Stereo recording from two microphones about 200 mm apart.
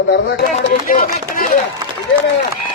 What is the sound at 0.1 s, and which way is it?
Speech, 55° left (ahead or behind).